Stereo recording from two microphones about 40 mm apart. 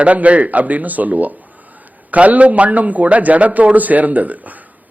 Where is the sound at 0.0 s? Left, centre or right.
Right.